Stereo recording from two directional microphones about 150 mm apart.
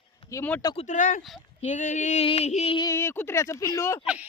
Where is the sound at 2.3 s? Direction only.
45° left (ahead or behind).